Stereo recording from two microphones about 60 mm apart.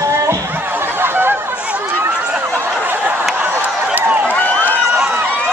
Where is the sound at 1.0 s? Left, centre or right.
Right.